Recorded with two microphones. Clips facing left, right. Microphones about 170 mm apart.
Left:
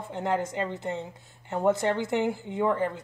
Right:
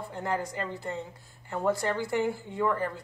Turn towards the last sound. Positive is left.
turn(degrees=20)  # may be behind; listen again after turning